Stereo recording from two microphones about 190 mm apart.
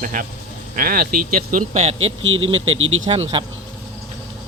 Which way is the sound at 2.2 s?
90° right.